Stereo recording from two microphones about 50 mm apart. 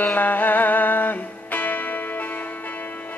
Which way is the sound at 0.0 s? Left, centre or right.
Left.